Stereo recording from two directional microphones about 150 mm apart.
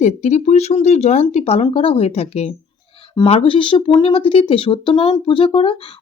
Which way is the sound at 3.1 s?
35° left (ahead or behind).